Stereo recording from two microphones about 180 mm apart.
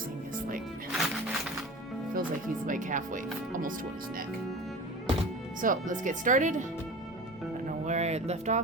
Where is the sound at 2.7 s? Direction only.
45° right (ahead or behind).